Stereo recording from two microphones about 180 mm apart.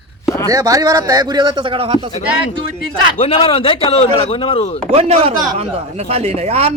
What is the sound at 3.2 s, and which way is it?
Speech, 30° left (ahead or behind).